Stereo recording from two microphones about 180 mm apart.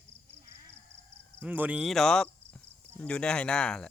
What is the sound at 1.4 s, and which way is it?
Speech, 10° right (ahead or behind).